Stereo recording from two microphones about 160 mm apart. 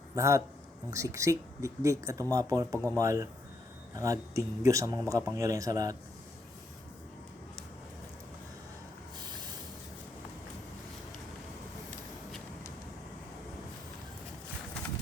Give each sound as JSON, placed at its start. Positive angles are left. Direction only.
{"t": 0.2, "sound": "speech", "side_deg": -20}
{"t": 2.7, "sound": "speech", "side_deg": 10}
{"t": 3.0, "sound": "speech", "side_deg": -20}